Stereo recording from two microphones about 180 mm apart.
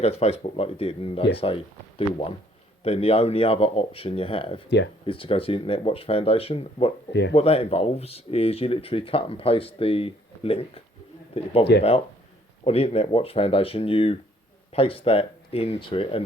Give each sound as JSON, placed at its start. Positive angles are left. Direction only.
{"t": 0.0, "sound": "speech", "side_deg": 35}
{"t": 2.8, "sound": "speech", "side_deg": 35}
{"t": 7.1, "sound": "speech", "side_deg": 75}
{"t": 7.3, "sound": "speech", "side_deg": 35}